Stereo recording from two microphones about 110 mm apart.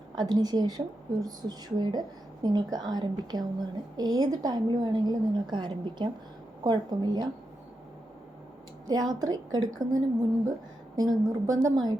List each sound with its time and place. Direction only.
0.2 s a woman's voice: 40° right (ahead or behind)
8.9 s a woman's voice: 35° right (ahead or behind)